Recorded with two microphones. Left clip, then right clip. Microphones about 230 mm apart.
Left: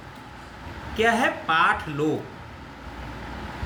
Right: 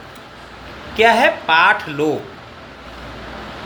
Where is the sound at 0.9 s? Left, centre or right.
Left.